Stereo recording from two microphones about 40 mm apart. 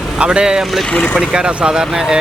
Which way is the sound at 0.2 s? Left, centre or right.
Right.